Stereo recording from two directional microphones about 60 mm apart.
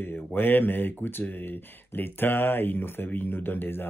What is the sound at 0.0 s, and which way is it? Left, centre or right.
Speech, left.